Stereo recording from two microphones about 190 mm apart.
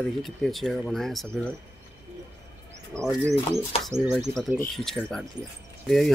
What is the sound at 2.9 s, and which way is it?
Speech, 15° right (ahead or behind).